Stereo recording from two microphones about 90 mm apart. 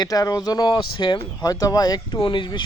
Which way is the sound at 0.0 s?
45° left (ahead or behind).